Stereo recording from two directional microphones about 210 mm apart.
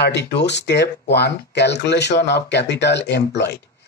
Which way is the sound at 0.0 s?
55° left (ahead or behind).